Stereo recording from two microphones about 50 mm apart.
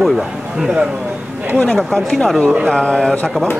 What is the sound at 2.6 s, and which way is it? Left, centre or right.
Speech, centre.